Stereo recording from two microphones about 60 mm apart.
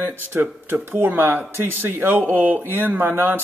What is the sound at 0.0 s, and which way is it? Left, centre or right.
A man's voice, right.